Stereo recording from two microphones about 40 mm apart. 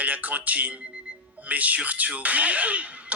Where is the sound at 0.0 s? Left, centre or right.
Right.